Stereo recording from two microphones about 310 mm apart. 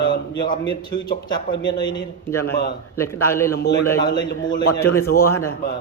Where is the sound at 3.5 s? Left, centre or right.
Left.